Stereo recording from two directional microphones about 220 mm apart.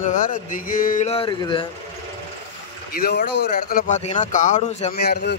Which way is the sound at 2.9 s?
45° left (ahead or behind).